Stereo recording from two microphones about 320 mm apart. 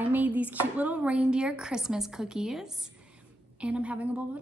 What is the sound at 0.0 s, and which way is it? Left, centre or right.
A woman's voice, centre.